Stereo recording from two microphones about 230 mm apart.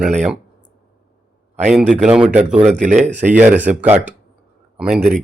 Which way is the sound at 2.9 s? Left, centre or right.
Centre.